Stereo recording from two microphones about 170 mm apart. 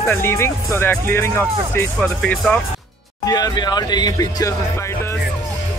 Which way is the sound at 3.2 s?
25° left (ahead or behind).